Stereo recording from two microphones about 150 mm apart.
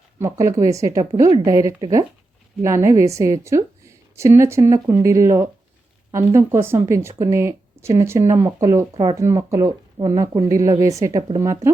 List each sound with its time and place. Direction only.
0.2 s a woman's voice: 20° right (ahead or behind)